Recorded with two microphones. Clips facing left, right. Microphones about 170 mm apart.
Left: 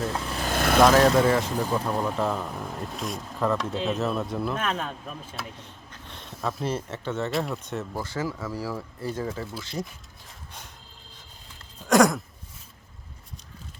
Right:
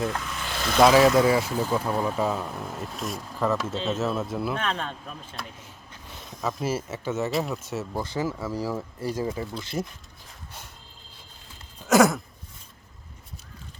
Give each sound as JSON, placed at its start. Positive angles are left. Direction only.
{"t": 0.3, "sound": "vehicle", "side_deg": 40}
{"t": 0.8, "sound": "speech", "side_deg": -5}
{"t": 5.5, "sound": "a sound", "side_deg": -5}
{"t": 6.3, "sound": "speech", "side_deg": 5}
{"t": 6.6, "sound": "speech", "side_deg": -5}
{"t": 7.9, "sound": "speech", "side_deg": -15}
{"t": 11.9, "sound": "a sound", "side_deg": -5}